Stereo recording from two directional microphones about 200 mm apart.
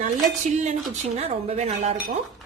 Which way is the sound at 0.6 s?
35° right (ahead or behind).